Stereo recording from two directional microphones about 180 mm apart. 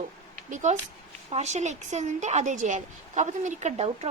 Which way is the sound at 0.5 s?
40° right (ahead or behind).